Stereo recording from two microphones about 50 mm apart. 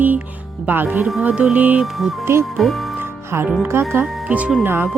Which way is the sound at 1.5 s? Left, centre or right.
Right.